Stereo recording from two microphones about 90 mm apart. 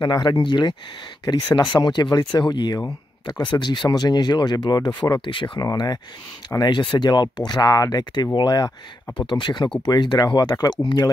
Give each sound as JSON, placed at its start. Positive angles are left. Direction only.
{"t": 0.0, "sound": "speech", "side_deg": 50}
{"t": 5.2, "sound": "speech", "side_deg": 70}
{"t": 5.6, "sound": "speech", "side_deg": 45}
{"t": 6.7, "sound": "speech", "side_deg": 60}
{"t": 9.2, "sound": "speech", "side_deg": 65}